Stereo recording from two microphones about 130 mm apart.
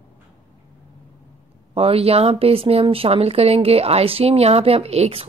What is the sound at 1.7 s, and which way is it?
Speech, 50° right (ahead or behind).